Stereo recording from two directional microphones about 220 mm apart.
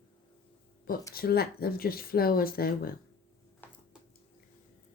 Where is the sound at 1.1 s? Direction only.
45° left (ahead or behind).